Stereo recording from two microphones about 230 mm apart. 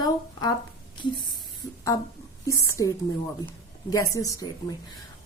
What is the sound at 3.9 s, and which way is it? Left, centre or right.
Speech, centre.